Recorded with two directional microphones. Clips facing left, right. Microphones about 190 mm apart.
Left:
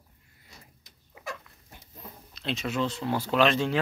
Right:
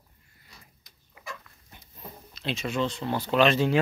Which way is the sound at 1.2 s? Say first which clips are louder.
Left 5 dB; 25° left (ahead or behind).